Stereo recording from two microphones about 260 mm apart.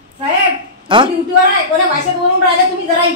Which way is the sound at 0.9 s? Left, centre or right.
Centre.